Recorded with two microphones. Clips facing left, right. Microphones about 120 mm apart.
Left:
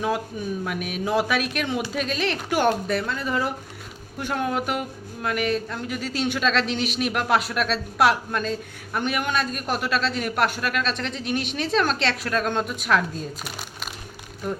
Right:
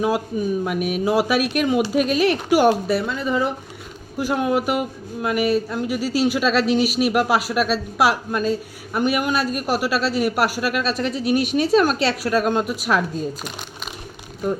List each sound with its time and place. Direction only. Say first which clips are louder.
0.6 s speech: right 6 dB; 10° right (ahead or behind)